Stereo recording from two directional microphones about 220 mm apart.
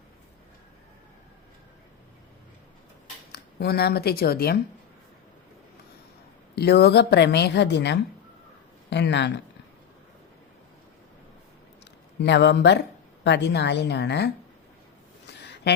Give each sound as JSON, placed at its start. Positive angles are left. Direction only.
{"t": 3.3, "sound": "speech", "side_deg": 45}
{"t": 6.6, "sound": "speech", "side_deg": 45}
{"t": 12.2, "sound": "speech", "side_deg": 50}